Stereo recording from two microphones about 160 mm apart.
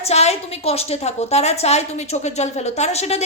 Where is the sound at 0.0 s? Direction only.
40° left (ahead or behind).